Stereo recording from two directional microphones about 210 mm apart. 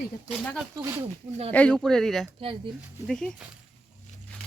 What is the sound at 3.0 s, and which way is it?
Speech, 5° left (ahead or behind).